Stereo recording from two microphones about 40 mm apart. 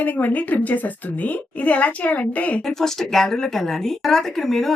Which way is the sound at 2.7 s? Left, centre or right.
Centre.